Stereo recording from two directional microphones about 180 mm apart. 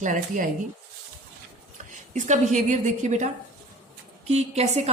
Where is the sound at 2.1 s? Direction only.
40° right (ahead or behind).